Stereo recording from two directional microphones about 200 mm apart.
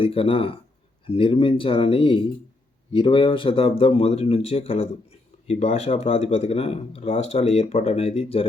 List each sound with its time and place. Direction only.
0.0 s speech: 30° left (ahead or behind)